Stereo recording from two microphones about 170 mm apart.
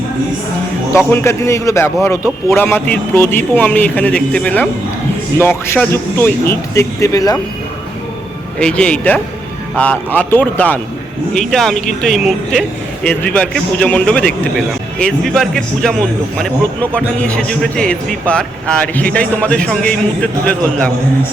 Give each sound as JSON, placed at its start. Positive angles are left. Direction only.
{"t": 0.9, "sound": "speech", "side_deg": 15}
{"t": 8.5, "sound": "speech", "side_deg": 5}